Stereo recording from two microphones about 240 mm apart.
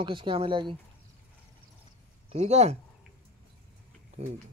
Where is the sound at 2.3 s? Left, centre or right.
Right.